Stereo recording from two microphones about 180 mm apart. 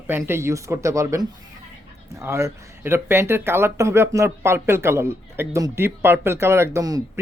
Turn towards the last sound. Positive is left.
turn(degrees=-20)  # may be behind; listen again after turning